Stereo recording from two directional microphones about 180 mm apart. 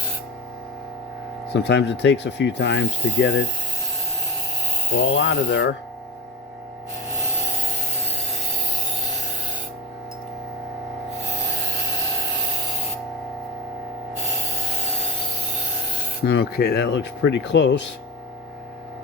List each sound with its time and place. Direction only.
1.5 s ratchet: 70° left (ahead or behind); by 3.3 s 90° left
4.9 s speech: 90° left
16.2 s ratchet: 60° left (ahead or behind); by 17.9 s 80° left